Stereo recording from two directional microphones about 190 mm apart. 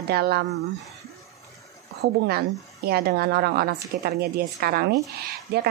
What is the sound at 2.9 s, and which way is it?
A woman's voice, 55° right (ahead or behind).